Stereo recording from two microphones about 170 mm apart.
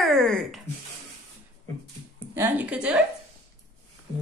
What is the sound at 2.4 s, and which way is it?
Speech, 10° right (ahead or behind).